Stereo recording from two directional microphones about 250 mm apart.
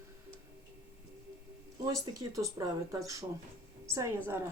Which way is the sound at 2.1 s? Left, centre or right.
Centre.